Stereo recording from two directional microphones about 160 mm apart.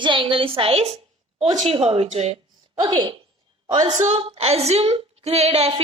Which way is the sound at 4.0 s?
40° right (ahead or behind).